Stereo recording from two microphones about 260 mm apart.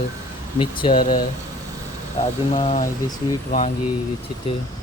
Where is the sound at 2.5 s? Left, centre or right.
Left.